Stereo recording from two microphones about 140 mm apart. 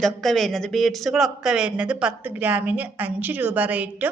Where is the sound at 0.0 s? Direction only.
Centre (ahead or behind).